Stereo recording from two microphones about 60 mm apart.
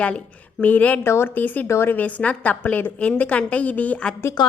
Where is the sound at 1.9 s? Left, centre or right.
Left.